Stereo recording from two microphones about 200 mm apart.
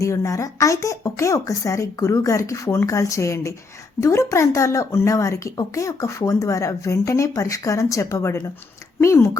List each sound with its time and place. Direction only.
0.0 s speech: 15° left (ahead or behind)